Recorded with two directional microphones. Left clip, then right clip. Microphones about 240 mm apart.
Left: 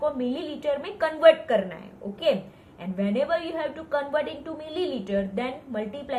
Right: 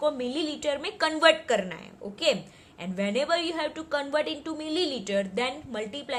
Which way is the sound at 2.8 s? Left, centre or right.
Right.